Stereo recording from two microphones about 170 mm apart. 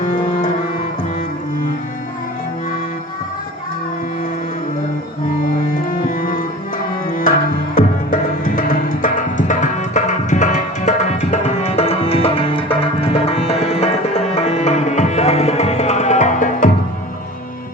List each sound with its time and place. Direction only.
0.0 s music: 50° left (ahead or behind)
7.8 s music: 55° left (ahead or behind)
9.5 s tabla: 45° left (ahead or behind)